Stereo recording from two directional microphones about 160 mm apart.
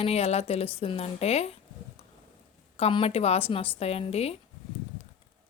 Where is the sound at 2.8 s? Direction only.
35° left (ahead or behind).